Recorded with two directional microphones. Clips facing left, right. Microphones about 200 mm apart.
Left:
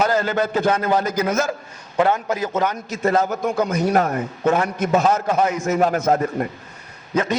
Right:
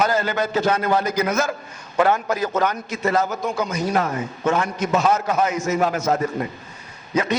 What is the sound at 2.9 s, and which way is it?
Speech, 40° left (ahead or behind).